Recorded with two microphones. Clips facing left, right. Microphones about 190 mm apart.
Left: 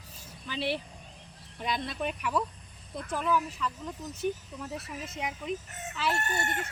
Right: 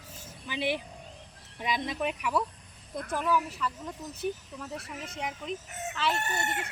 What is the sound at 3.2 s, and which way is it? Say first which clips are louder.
Chicken: even; 5° right (ahead or behind).